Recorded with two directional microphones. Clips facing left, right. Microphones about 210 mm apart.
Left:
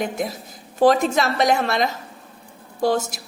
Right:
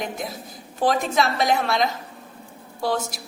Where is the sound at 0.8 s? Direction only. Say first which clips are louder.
Left 5 dB; 45° left (ahead or behind).